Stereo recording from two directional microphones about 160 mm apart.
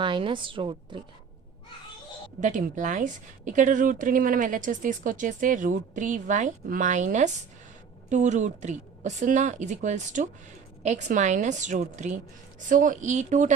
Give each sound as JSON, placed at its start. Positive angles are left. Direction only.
{"t": 0.0, "sound": "a woman's voice", "side_deg": -30}
{"t": 2.4, "sound": "a woman's voice", "side_deg": -50}